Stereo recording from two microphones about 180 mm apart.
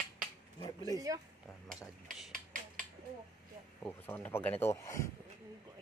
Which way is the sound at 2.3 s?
45° right (ahead or behind).